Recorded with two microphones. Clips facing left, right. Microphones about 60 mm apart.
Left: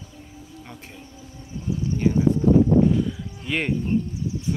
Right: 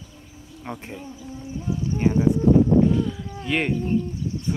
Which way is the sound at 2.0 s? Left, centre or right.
Right.